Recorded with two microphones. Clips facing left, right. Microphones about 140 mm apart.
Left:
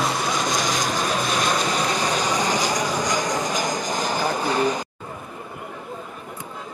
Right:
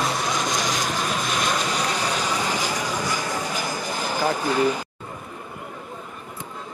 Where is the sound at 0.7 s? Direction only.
35° left (ahead or behind).